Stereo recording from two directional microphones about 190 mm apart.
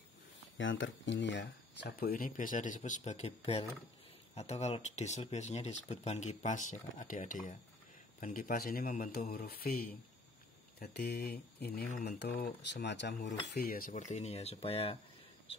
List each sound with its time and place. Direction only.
0.6 s speech: 85° left; by 15.0 s 30° left (ahead or behind)